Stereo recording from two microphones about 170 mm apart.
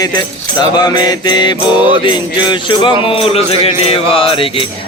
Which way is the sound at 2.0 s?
25° left (ahead or behind).